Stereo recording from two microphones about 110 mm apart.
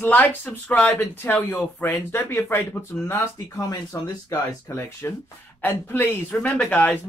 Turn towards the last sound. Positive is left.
turn(degrees=15)  # may be behind; listen again after turning